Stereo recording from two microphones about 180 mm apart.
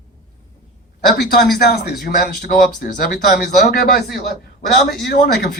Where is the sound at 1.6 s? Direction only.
65° left (ahead or behind).